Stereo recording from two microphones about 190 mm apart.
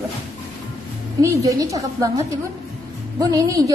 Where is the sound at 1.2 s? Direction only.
20° right (ahead or behind).